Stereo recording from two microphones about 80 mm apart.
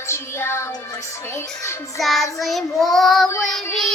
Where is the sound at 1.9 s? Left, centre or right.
Centre.